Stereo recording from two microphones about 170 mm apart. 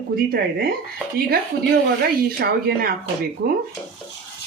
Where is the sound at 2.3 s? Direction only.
65° right (ahead or behind).